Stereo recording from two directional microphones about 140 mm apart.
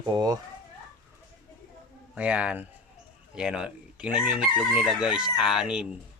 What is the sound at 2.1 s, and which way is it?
Speech, 10° right (ahead or behind).